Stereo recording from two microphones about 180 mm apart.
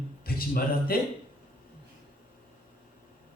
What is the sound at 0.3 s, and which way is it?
Speech, 55° left (ahead or behind).